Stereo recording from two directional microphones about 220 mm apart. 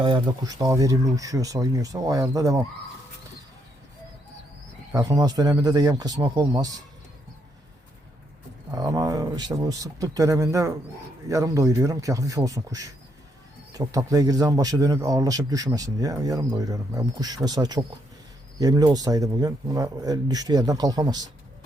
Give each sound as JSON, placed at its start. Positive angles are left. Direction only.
{"t": 0.0, "sound": "speech", "side_deg": -20}
{"t": 4.9, "sound": "speech", "side_deg": -15}
{"t": 8.7, "sound": "speech", "side_deg": -15}